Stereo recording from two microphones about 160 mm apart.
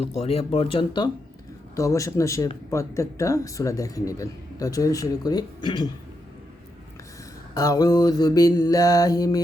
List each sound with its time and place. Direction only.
0.0 s speech: 40° left (ahead or behind)
1.7 s speech: 20° left (ahead or behind)
7.5 s speech: 20° left (ahead or behind)